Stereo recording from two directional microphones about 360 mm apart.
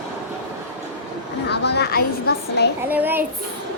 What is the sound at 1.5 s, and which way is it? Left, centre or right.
A woman's voice, left.